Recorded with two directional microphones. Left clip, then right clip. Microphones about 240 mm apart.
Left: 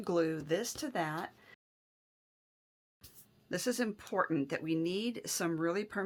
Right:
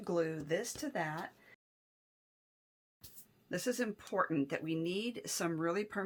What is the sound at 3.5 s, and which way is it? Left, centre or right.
Speech, centre.